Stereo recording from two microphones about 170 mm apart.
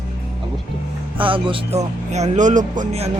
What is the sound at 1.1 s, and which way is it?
Speech, 30° right (ahead or behind).